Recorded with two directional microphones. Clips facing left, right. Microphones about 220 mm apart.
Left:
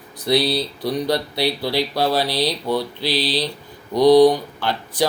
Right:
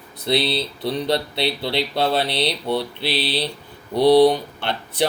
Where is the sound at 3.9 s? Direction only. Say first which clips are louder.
Left 2 dB; 60° right (ahead or behind).